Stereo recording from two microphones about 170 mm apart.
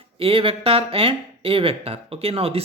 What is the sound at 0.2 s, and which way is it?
Speech, 35° right (ahead or behind).